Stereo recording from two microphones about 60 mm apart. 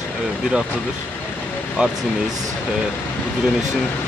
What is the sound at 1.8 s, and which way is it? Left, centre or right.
Speech, centre.